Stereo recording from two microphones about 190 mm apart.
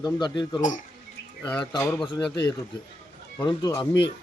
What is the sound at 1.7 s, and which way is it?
Speech, 15° left (ahead or behind).